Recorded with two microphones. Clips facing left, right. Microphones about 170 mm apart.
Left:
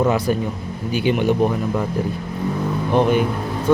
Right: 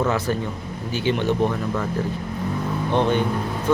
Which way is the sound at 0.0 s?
15° left (ahead or behind).